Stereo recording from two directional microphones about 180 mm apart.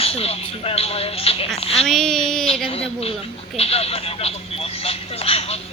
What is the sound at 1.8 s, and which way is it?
Speech, centre (ahead or behind).